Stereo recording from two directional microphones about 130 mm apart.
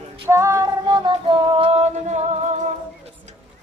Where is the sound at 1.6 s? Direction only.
55° right (ahead or behind).